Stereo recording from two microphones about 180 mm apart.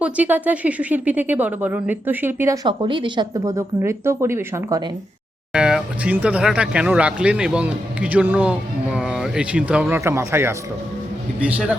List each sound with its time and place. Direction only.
0.0 s speech: 10° right (ahead or behind)
2.6 s speech: 25° right (ahead or behind)
5.5 s speech: 5° right (ahead or behind)